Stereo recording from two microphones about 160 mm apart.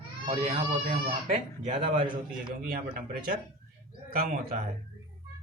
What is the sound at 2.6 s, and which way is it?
Speech, 60° right (ahead or behind).